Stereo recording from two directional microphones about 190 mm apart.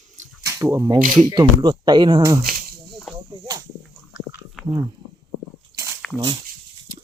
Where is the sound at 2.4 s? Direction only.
50° right (ahead or behind).